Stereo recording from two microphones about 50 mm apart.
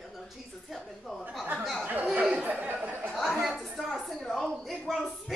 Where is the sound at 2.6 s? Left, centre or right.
Right.